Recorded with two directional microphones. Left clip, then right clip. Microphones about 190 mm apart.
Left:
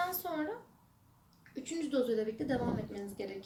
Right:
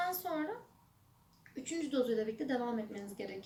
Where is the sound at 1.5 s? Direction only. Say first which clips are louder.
Left 1 dB; 15° left (ahead or behind).